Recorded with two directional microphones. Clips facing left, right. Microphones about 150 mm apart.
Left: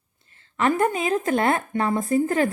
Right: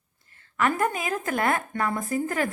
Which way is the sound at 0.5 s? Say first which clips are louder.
Left 4 dB; 25° left (ahead or behind).